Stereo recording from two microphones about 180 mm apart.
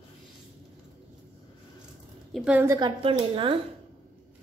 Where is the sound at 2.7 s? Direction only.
25° right (ahead or behind).